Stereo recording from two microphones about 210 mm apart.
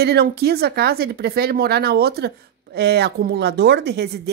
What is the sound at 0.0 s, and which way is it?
Speech, 50° right (ahead or behind).